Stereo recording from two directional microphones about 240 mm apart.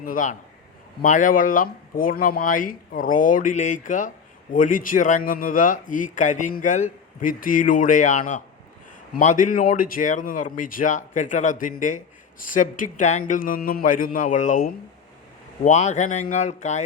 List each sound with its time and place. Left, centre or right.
0.0 s speech: left